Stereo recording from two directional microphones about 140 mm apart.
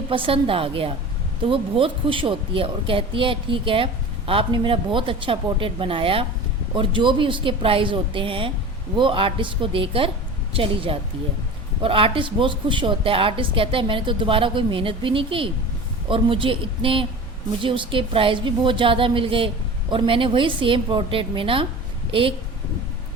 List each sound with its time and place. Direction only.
0.1 s a woman's voice: 40° right (ahead or behind)